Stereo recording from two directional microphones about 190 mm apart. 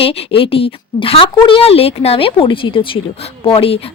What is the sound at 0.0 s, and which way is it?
A woman's voice, 30° left (ahead or behind).